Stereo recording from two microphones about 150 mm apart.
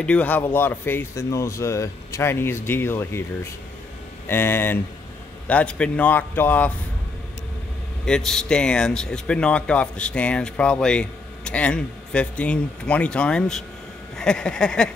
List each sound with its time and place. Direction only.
0.0 s speech: 10° left (ahead or behind)
8.0 s speech: 5° left (ahead or behind)
14.1 s a sound: 5° left (ahead or behind)